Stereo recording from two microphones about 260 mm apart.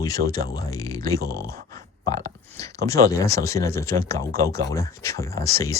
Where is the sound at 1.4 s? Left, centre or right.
Right.